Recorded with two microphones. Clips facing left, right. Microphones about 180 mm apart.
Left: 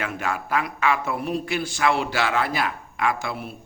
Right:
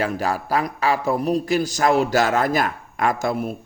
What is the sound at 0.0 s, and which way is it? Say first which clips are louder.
A man's voice: right 5 dB; 35° right (ahead or behind).